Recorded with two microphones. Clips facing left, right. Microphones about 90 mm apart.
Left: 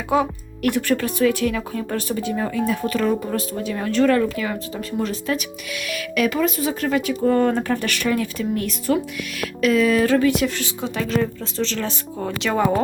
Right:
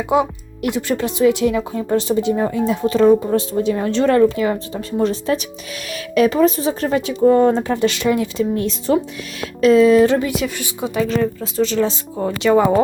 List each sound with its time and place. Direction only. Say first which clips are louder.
0.1 s speech: right 2 dB; 15° right (ahead or behind)
10.6 s a woman's voice: right 5 dB; 10° right (ahead or behind)
11.6 s a woman's voice: right 8 dB; 15° right (ahead or behind)